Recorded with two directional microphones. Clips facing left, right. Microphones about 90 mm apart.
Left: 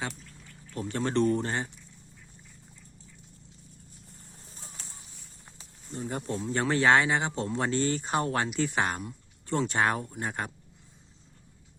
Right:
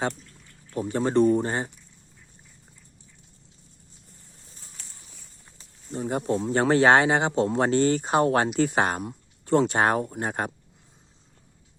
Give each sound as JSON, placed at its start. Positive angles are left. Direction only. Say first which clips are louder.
{"t": 0.7, "sound": "speech", "louder": "right 6 dB", "side_deg": -15}
{"t": 6.0, "sound": "speech", "louder": "right 7 dB", "side_deg": -40}
{"t": 6.4, "sound": "speech", "louder": "right 5 dB", "side_deg": -50}